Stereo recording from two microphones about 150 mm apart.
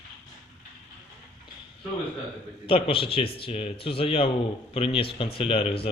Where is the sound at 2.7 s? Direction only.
40° left (ahead or behind).